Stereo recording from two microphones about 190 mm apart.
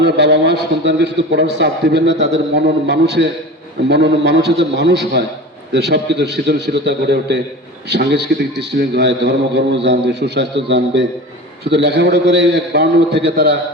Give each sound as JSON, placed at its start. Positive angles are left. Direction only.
{"t": 0.0, "sound": "a man's voice", "side_deg": -60}